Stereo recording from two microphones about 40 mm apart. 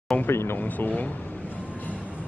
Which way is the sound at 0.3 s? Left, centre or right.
Left.